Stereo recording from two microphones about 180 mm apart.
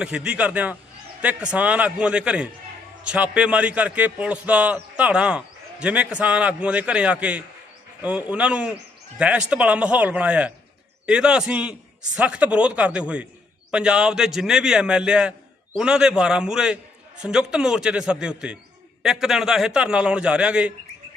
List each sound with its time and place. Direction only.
0.0 s a man's voice: 5° right (ahead or behind)